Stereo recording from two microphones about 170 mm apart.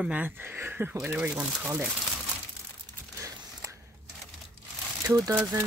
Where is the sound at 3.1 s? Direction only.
20° right (ahead or behind).